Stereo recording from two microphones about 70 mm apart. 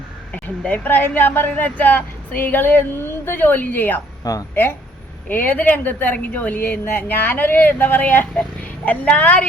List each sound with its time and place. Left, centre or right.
0.9 s a woman's voice: left
4.2 s speech: left
4.5 s a woman's voice: left